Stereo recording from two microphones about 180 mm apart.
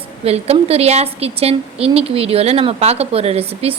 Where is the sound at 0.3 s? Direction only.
35° right (ahead or behind).